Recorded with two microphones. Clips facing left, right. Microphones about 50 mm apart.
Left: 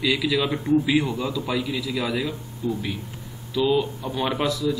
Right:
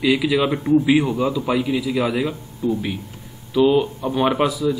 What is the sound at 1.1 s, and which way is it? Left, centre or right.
A man's voice, right.